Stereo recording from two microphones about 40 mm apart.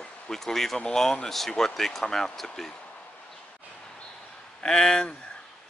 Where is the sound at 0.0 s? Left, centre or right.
Centre.